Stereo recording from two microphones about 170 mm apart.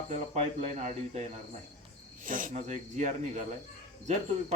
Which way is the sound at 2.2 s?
50° right (ahead or behind).